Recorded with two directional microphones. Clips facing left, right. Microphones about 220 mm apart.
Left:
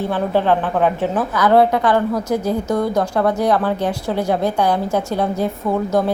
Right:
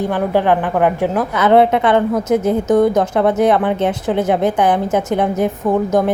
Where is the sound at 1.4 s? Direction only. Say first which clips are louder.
Right 2 dB; 20° right (ahead or behind).